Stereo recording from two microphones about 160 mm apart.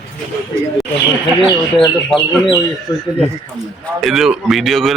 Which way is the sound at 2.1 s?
Centre (ahead or behind).